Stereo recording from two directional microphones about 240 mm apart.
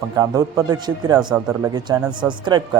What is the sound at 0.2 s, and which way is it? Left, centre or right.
Speech, centre.